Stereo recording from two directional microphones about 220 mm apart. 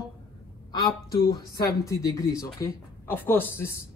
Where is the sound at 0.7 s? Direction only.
20° left (ahead or behind).